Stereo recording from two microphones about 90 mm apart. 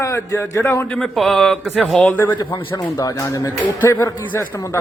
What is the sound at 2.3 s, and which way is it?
A man's voice, 50° left (ahead or behind).